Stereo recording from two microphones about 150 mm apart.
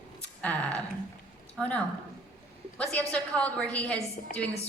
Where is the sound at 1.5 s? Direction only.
10° left (ahead or behind).